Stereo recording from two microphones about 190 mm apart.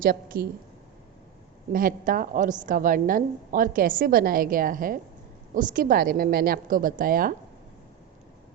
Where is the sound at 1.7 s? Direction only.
45° right (ahead or behind).